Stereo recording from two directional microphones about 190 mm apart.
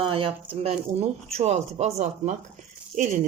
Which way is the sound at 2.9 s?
40° right (ahead or behind).